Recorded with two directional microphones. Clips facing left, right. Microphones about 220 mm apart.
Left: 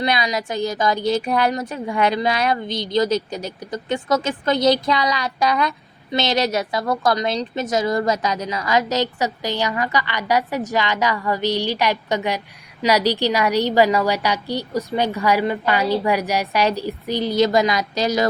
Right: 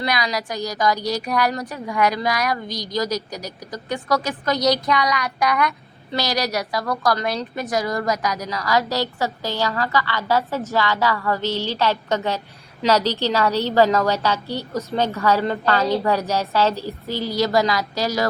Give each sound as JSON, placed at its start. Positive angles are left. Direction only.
{"t": 0.0, "sound": "a woman's voice", "side_deg": 20}